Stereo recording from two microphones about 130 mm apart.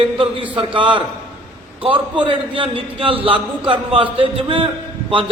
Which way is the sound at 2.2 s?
45° right (ahead or behind).